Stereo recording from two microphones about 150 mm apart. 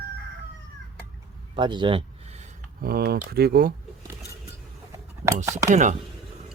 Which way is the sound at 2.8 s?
90° right.